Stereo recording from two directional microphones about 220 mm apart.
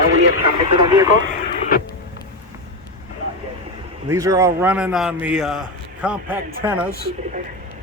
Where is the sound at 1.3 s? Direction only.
40° left (ahead or behind).